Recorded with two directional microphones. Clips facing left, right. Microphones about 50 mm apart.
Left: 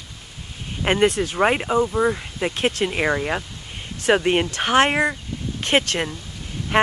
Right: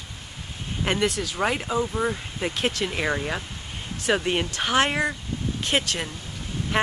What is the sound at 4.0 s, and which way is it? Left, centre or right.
Speech, left.